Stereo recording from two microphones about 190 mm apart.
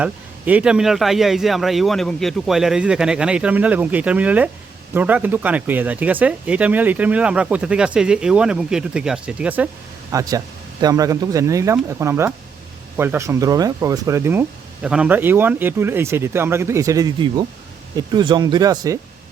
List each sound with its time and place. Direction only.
0.0 s speech: 5° right (ahead or behind)
10.1 s speech: 15° right (ahead or behind)